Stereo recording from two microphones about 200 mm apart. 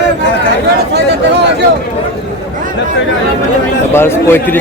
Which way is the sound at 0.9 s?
55° right (ahead or behind).